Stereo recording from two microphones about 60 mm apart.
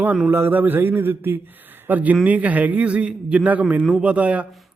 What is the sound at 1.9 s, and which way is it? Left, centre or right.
A man's voice, right.